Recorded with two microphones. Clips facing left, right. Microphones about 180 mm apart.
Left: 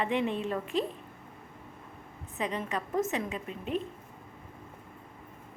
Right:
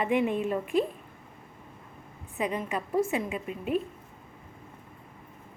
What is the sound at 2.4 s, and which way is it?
Speech, 10° right (ahead or behind).